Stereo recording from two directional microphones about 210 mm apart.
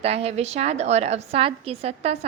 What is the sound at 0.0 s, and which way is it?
A woman's voice, 30° right (ahead or behind).